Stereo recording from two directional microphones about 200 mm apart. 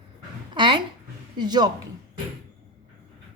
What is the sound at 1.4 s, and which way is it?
Speech, 20° right (ahead or behind).